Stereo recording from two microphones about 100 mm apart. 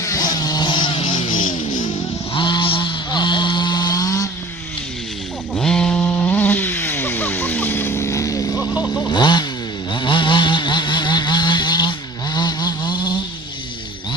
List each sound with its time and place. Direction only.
0.0 s vehicle: 40° left (ahead or behind)
5.5 s chainsaw: 5° left (ahead or behind); by 8.7 s 35° left (ahead or behind)
9.0 s motorcycle: 45° left (ahead or behind)
9.9 s vehicle: 55° left (ahead or behind)